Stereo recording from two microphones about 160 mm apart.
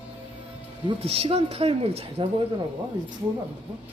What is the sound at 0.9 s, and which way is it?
Speech, 35° right (ahead or behind).